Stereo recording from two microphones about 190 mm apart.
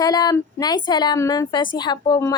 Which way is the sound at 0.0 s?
20° left (ahead or behind).